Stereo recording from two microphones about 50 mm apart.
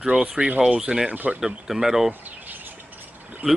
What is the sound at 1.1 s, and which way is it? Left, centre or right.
Speech, right.